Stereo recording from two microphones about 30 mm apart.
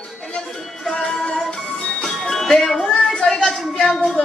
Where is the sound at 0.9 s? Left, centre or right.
Left.